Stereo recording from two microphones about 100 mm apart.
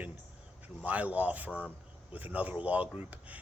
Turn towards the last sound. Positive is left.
turn(degrees=-15)  # may be behind; listen again after turning